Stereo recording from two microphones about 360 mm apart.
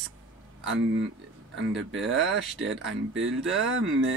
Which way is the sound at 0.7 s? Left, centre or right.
Right.